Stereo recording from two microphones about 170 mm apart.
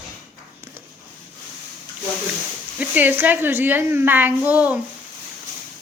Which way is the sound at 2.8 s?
10° right (ahead or behind).